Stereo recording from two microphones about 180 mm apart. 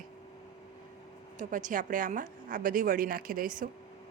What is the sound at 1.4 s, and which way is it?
A woman's voice, 45° right (ahead or behind).